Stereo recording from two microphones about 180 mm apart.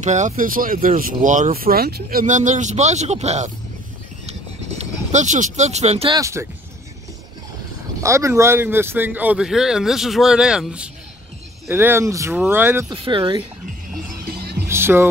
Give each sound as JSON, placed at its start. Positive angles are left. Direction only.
{"t": 0.0, "sound": "speech", "side_deg": -40}
{"t": 4.3, "sound": "a sound", "side_deg": -35}
{"t": 6.1, "sound": "speech", "side_deg": -15}
{"t": 8.0, "sound": "a man's voice", "side_deg": -15}
{"t": 12.9, "sound": "speech", "side_deg": -30}
{"t": 14.2, "sound": "music", "side_deg": -60}
{"t": 14.7, "sound": "music", "side_deg": -15}